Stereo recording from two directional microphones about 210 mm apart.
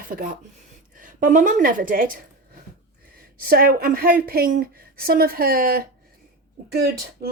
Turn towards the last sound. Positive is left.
turn(degrees=-50)  # may be behind; listen again after turning